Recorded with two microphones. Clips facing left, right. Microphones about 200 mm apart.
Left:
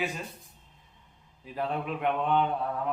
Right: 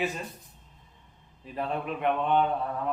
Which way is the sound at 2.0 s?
Centre (ahead or behind).